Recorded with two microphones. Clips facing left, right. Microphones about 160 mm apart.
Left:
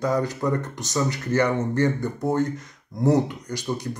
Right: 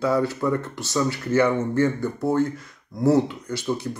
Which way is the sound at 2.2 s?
20° left (ahead or behind).